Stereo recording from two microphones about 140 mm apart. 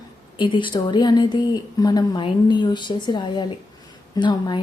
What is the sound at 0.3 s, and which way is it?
A woman's voice, 35° left (ahead or behind).